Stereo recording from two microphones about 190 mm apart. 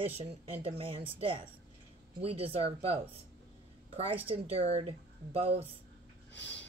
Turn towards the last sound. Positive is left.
turn(degrees=70)  # may be behind; listen again after turning